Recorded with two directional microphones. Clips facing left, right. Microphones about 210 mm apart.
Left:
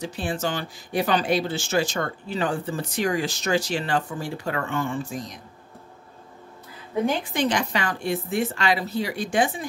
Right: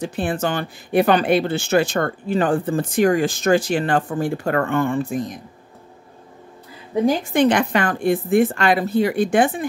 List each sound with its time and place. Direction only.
0.0 s speech: 55° right (ahead or behind)
7.1 s speech: 50° right (ahead or behind)